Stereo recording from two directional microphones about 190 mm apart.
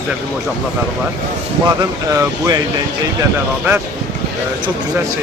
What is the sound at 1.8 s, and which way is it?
Speech, 20° right (ahead or behind).